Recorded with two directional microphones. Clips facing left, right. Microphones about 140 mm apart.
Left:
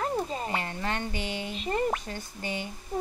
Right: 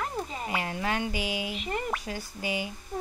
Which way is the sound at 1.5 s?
35° left (ahead or behind).